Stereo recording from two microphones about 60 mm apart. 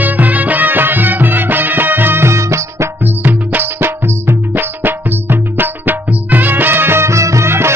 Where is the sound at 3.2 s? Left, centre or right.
Right.